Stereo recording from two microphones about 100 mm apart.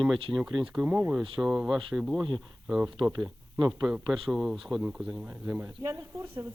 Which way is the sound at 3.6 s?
Centre (ahead or behind).